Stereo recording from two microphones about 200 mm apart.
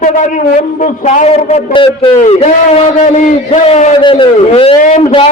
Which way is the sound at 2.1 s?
40° left (ahead or behind).